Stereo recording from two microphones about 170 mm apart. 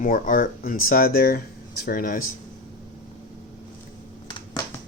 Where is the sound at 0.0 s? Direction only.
55° left (ahead or behind).